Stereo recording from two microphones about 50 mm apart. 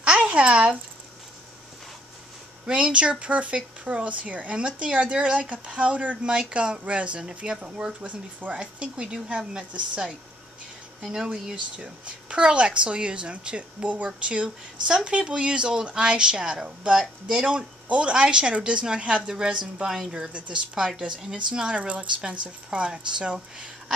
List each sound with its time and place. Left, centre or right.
0.0 s a sound: right
2.6 s speech: centre
11.1 s a woman's voice: centre
11.5 s speech: right
20.7 s a woman's voice: centre